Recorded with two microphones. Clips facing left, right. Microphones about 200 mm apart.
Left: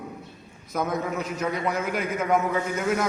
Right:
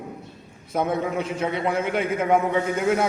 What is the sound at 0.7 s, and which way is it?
A man's voice, 30° right (ahead or behind).